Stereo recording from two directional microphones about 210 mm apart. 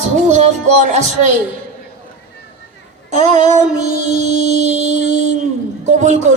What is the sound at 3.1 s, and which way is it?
Music, 35° right (ahead or behind).